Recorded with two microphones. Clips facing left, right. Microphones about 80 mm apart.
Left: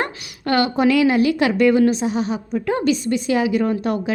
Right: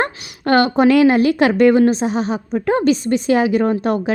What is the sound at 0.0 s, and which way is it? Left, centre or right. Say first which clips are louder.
A woman's voice: right 4 dB; right.